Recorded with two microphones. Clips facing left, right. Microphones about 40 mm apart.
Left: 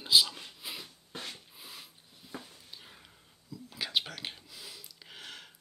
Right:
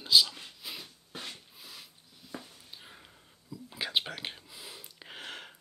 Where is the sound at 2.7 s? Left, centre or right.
Centre.